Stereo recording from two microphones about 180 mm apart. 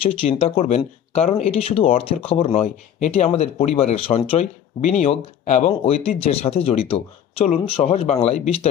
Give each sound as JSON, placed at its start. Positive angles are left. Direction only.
{"t": 0.0, "sound": "speech", "side_deg": 30}